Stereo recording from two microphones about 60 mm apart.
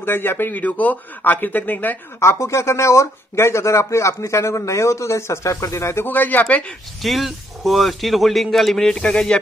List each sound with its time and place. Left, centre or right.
0.0 s speech: left
2.1 s speech: left
6.0 s speech: left
7.0 s a man's voice: centre
8.9 s speech: centre